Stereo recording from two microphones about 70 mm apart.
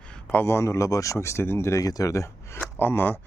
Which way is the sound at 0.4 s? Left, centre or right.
Left.